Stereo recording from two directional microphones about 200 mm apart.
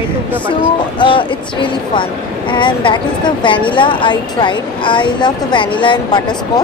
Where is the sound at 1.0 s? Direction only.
25° left (ahead or behind).